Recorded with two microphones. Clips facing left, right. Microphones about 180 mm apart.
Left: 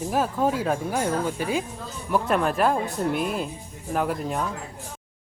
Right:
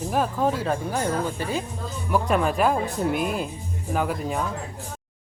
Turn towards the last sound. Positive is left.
turn(degrees=0)  # may be behind; listen again after turning